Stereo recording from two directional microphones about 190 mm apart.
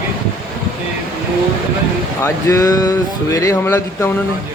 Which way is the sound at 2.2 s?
15° left (ahead or behind).